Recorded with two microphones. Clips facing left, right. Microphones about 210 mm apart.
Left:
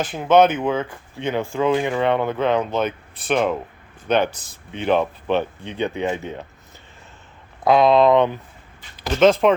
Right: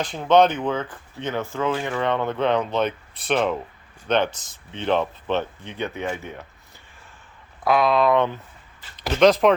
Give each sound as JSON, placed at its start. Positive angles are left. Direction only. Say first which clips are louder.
{"t": 0.0, "sound": "speech", "louder": "left 2 dB", "side_deg": 5}
{"t": 7.6, "sound": "speech", "louder": "left 5 dB", "side_deg": 25}
{"t": 9.4, "sound": "speech", "louder": "left 1 dB", "side_deg": 0}